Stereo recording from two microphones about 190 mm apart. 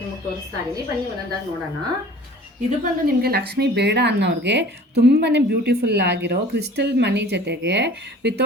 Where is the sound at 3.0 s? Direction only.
55° right (ahead or behind).